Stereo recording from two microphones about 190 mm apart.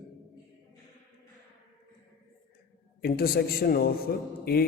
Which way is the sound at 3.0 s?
50° left (ahead or behind).